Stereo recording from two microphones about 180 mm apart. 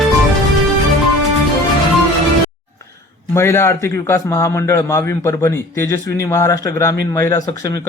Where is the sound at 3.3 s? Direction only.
15° left (ahead or behind).